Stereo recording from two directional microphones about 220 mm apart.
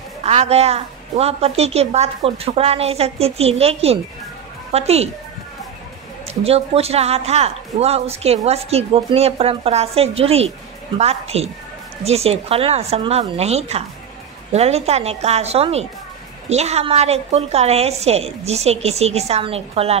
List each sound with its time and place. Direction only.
0.2 s speech: 30° right (ahead or behind)
6.2 s speech: 25° right (ahead or behind)